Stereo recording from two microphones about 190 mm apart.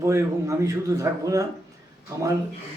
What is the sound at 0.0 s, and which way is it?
A man's voice, 15° right (ahead or behind).